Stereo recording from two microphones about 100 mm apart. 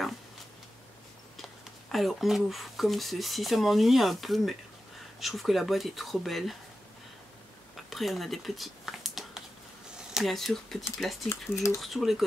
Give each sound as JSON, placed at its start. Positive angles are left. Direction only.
{"t": 1.3, "sound": "speech", "side_deg": 0}
{"t": 7.7, "sound": "a sound", "side_deg": 0}
{"t": 10.1, "sound": "speech", "side_deg": 0}
{"t": 11.2, "sound": "speech", "side_deg": 30}
{"t": 11.8, "sound": "speech", "side_deg": 0}